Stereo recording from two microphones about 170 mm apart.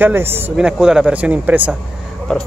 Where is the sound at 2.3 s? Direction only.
5° left (ahead or behind).